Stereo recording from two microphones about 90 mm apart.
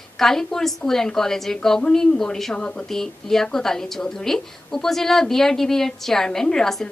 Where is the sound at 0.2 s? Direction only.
5° left (ahead or behind).